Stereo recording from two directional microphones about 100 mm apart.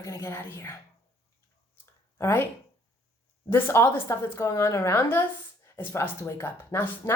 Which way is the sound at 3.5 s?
25° left (ahead or behind).